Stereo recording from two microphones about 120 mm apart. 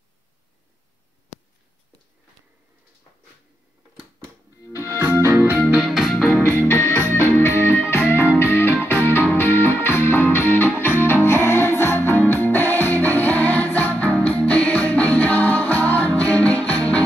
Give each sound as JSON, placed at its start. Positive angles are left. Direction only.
{"t": 4.7, "sound": "music", "side_deg": -20}
{"t": 5.7, "sound": "music", "side_deg": -5}
{"t": 6.3, "sound": "music", "side_deg": 15}